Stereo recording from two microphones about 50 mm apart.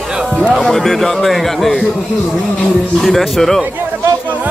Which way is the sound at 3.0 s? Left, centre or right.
Centre.